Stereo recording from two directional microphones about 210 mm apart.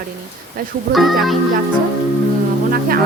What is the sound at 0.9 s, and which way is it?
Speech, centre (ahead or behind).